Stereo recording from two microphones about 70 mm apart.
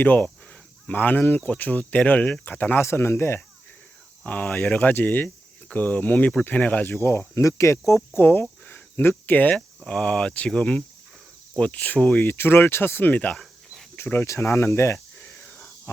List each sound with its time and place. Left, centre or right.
0.0 s speech: left
2.8 s speech: left
4.2 s speech: centre
4.4 s speech: centre
4.8 s speech: left
6.9 s speech: left
9.6 s speech: centre
12.2 s speech: left
13.3 s dog: centre
13.9 s a sound: left